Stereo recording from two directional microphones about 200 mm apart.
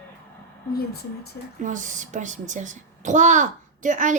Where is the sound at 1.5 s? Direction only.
40° right (ahead or behind).